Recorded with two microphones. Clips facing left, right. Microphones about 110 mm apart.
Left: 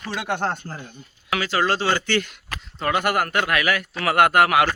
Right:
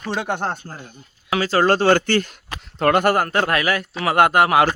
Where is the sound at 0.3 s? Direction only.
15° right (ahead or behind).